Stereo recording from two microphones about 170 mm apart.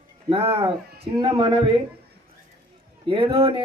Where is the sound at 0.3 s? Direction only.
35° right (ahead or behind).